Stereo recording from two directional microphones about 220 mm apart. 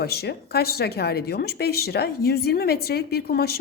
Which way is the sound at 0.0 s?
45° left (ahead or behind).